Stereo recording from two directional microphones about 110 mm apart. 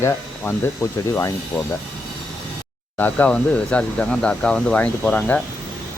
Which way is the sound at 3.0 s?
15° left (ahead or behind).